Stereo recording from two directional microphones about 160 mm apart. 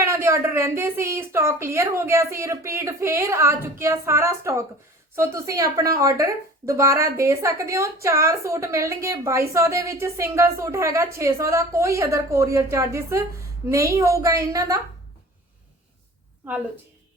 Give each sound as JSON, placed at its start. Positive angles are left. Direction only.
{"t": 0.0, "sound": "a woman's voice", "side_deg": -20}